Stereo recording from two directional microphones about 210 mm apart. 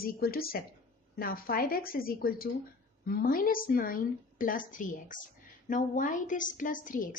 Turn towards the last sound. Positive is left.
turn(degrees=40)  # may be behind; listen again after turning